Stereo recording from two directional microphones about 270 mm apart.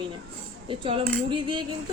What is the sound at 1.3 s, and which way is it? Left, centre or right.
Cutlery, centre.